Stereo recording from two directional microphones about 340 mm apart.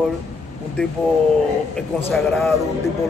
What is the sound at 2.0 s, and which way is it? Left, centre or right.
Speech, centre.